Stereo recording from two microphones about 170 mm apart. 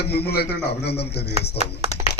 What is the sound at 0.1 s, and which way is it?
A man's voice, 70° left (ahead or behind).